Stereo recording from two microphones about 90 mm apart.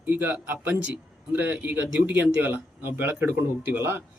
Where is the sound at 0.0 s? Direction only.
20° right (ahead or behind).